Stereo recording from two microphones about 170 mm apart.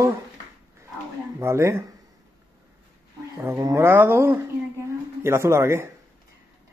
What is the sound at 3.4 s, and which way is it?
Speech, 20° right (ahead or behind).